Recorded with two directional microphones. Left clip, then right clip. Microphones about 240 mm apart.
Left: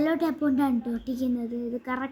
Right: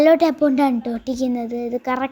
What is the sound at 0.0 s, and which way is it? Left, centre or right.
A child's voice, right.